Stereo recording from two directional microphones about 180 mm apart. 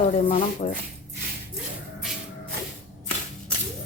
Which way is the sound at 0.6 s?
40° left (ahead or behind).